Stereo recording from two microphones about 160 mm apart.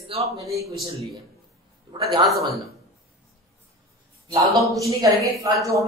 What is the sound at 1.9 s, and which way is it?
Speech, 30° right (ahead or behind).